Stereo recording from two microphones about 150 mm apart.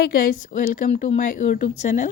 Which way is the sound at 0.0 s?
85° left.